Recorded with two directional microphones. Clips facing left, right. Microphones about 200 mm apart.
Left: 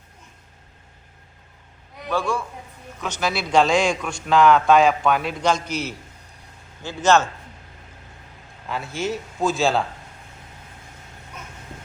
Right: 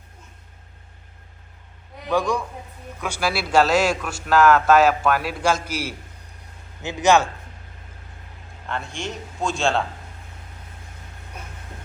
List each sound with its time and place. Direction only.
2.0 s a man's voice: 15° right (ahead or behind)
8.7 s a man's voice: 5° left (ahead or behind)